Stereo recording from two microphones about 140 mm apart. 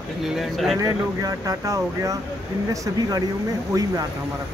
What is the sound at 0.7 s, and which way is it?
Speech, 25° right (ahead or behind).